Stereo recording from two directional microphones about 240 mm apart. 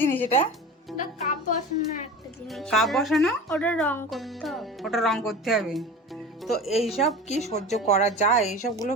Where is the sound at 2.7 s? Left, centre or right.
Centre.